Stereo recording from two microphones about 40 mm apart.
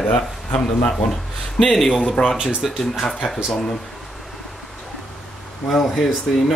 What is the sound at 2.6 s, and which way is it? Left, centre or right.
Speech, centre.